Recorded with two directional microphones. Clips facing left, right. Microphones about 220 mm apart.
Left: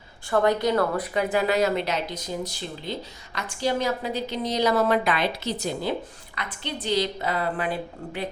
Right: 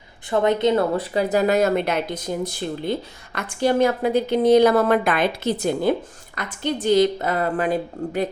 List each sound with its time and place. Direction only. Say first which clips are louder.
0.3 s speech: right 3 dB; 20° right (ahead or behind); by 8.3 s 45° right (ahead or behind)